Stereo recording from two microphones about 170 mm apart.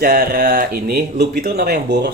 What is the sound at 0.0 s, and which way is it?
Speech, 60° right (ahead or behind).